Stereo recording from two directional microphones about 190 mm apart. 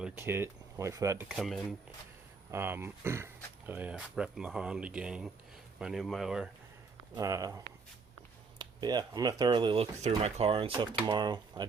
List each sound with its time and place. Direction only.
0.0 s speech: 10° right (ahead or behind)
1.3 s speech: centre (ahead or behind)
2.5 s speech: 10° right (ahead or behind)
7.1 s speech: 15° right (ahead or behind)